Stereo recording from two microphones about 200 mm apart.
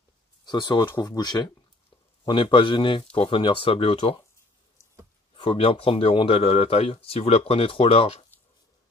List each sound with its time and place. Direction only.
0.5 s speech: 20° left (ahead or behind)
5.3 s speech: 25° left (ahead or behind)